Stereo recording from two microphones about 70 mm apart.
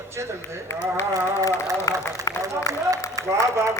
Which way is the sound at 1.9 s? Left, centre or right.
Left.